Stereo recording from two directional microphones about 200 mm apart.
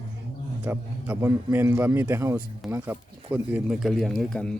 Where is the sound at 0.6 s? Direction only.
10° right (ahead or behind).